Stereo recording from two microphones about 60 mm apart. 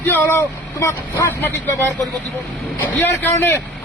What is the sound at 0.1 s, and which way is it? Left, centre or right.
Speech, left.